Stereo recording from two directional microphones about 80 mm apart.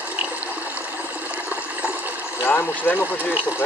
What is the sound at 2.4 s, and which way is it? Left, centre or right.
Speech, left.